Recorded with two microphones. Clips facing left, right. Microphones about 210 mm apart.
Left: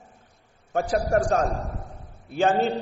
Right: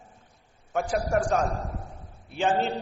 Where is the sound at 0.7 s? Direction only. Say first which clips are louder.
Left 3 dB; 35° left (ahead or behind).